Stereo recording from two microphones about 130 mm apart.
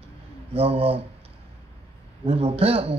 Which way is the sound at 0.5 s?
50° right (ahead or behind).